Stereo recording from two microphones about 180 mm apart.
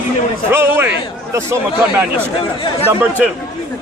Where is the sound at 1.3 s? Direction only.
15° right (ahead or behind).